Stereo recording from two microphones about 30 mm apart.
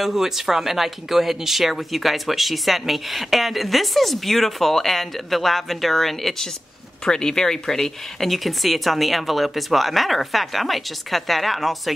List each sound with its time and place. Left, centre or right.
0.0 s speech: centre
7.1 s speech: left
8.3 s speech: centre